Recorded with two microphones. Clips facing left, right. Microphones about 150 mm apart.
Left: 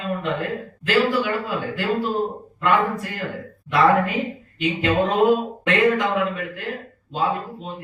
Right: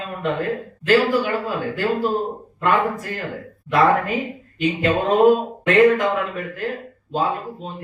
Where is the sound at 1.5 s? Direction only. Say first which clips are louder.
Right 2 dB; 40° right (ahead or behind).